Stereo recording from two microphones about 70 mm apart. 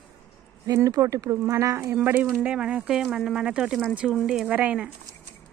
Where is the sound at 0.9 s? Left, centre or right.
Right.